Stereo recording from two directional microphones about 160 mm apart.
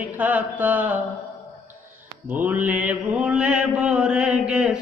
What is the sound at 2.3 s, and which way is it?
Mantra, 10° right (ahead or behind).